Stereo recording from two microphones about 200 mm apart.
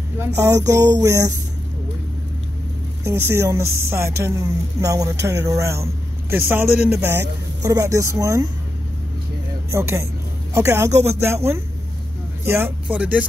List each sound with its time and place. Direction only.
0.4 s speech: 15° right (ahead or behind)
3.0 s speech: 10° right (ahead or behind)
9.7 s speech: 15° right (ahead or behind)